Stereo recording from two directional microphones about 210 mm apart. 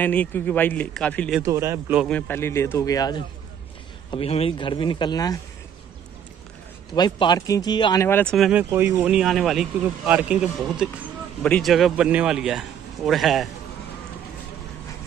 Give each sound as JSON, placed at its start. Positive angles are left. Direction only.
{"t": 0.0, "sound": "speech", "side_deg": 5}
{"t": 1.4, "sound": "a man's voice", "side_deg": -15}
{"t": 2.0, "sound": "speech", "side_deg": 10}
{"t": 4.1, "sound": "a man's voice", "side_deg": 30}
{"t": 7.0, "sound": "speech", "side_deg": 20}
{"t": 8.6, "sound": "speech", "side_deg": -15}